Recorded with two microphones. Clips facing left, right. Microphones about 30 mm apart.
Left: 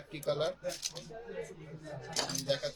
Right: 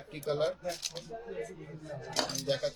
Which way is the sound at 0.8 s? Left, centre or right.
Right.